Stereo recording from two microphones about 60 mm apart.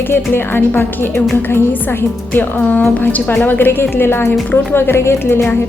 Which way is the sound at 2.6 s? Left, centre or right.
Left.